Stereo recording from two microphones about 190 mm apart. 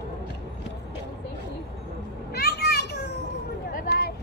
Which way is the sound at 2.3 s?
55° left (ahead or behind).